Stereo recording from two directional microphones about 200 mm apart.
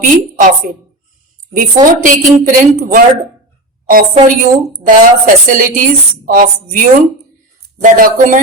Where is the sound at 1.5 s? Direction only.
40° right (ahead or behind).